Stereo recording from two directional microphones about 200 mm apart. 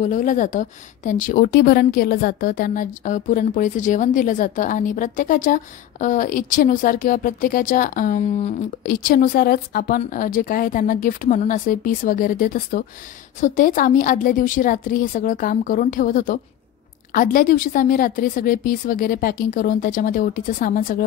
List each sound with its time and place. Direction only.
0.0 s a woman's voice: 40° left (ahead or behind)